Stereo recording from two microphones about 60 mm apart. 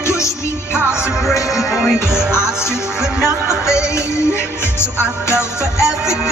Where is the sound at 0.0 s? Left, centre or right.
Left.